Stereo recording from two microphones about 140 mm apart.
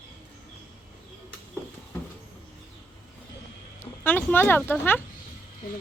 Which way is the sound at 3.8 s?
15° left (ahead or behind).